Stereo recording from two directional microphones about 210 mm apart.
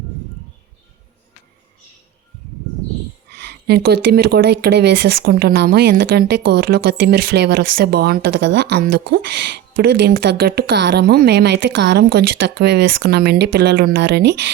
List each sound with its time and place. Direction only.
3.3 s speech: 55° right (ahead or behind)